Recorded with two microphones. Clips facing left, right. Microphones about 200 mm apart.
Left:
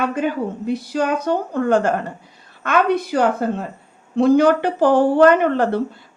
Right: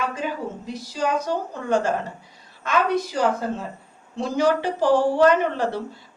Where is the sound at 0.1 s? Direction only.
60° left (ahead or behind).